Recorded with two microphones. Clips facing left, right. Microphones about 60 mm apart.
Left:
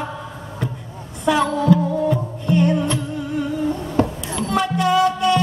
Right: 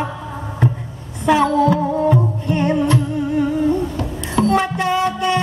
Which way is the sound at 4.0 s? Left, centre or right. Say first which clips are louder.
Left 6 dB; left.